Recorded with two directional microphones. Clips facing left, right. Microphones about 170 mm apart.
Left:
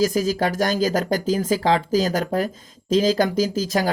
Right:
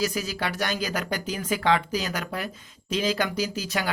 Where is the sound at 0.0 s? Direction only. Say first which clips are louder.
Left 8 dB; 40° left (ahead or behind).